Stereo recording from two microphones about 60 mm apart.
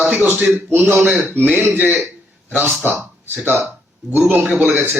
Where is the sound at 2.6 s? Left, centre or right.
Right.